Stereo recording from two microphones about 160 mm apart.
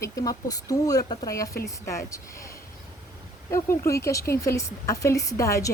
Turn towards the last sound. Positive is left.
turn(degrees=20)  # may be behind; listen again after turning